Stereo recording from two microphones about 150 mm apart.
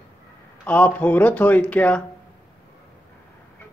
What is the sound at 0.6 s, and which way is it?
Speech, 10° left (ahead or behind).